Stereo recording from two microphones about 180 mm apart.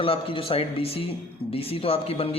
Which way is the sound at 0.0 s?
30° left (ahead or behind).